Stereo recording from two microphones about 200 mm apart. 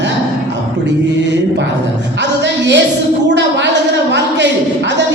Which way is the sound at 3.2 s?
60° right (ahead or behind).